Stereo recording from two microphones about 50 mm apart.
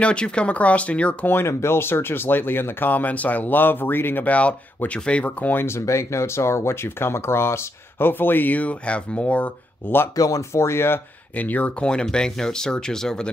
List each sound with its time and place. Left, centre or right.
0.0 s speech: left
1.2 s speech: left
1.5 s speech: left
4.3 s speech: left
5.6 s speech: left
10.3 s speech: left
11.3 s speech: left
11.8 s speech: centre